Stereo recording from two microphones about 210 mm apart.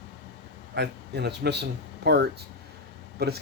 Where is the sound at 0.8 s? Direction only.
55° right (ahead or behind).